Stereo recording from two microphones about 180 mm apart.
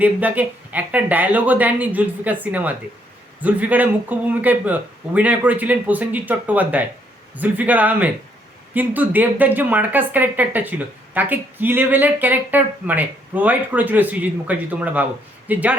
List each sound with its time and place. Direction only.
0.0 s a woman's voice: 10° right (ahead or behind)